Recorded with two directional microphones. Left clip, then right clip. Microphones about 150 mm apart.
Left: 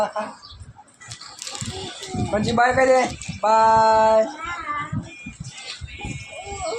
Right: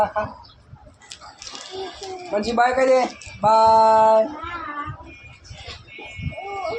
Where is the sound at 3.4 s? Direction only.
30° left (ahead or behind).